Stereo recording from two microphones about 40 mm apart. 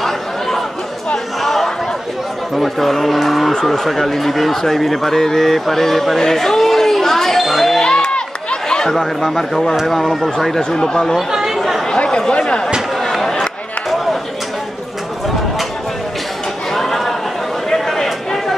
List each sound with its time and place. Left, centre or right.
0.0 s chatter: centre
2.5 s speech: centre
7.8 s a sound: left
8.6 s speech: centre
10.6 s speech: centre
11.1 s chatter: centre
11.9 s chatter: centre
13.0 s a sound: centre
16.7 s a sound: centre